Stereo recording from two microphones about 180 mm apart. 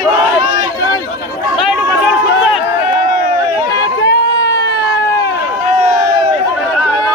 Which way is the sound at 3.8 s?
75° left (ahead or behind).